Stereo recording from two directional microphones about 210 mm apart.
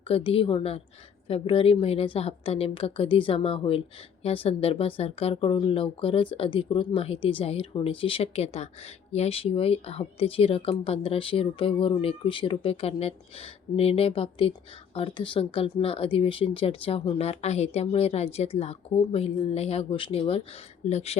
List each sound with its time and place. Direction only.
0.1 s speech: 25° left (ahead or behind)